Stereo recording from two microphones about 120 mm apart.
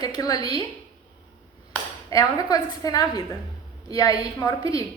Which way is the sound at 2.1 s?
30° left (ahead or behind).